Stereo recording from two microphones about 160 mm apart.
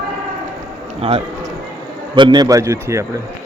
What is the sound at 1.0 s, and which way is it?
Speech, 35° right (ahead or behind).